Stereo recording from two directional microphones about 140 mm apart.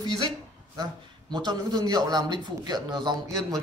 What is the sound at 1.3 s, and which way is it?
A man's voice, 30° right (ahead or behind).